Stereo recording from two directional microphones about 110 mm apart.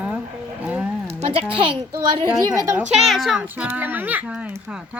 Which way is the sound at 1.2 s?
60° right (ahead or behind).